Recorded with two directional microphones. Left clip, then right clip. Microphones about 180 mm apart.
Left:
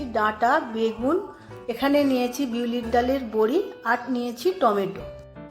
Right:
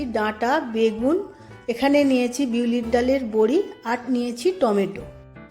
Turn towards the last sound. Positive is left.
turn(degrees=-40)  # may be behind; listen again after turning